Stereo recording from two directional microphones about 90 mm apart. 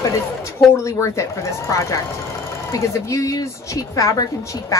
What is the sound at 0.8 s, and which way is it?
A woman's voice, 35° left (ahead or behind).